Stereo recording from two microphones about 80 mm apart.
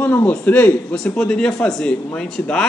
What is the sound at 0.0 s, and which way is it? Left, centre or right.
A man's voice, left.